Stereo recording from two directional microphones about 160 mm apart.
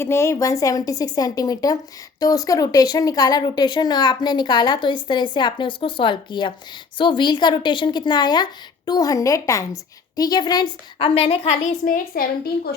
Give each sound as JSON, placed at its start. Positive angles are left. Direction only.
{"t": 0.0, "sound": "speech", "side_deg": 15}
{"t": 11.1, "sound": "a woman's voice", "side_deg": 35}
{"t": 12.1, "sound": "a woman's voice", "side_deg": 70}